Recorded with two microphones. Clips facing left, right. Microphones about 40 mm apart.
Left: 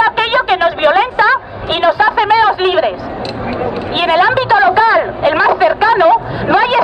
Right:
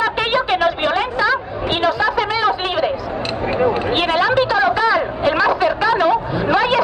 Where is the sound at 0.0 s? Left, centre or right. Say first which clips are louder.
Left 6 dB; left.